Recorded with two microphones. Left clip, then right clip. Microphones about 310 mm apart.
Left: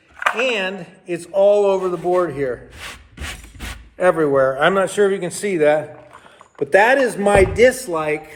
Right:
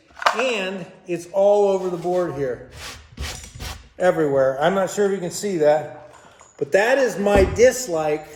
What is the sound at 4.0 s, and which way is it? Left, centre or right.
A man's voice, centre.